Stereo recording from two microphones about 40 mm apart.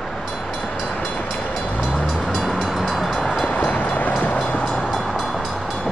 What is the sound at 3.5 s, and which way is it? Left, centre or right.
Train, left.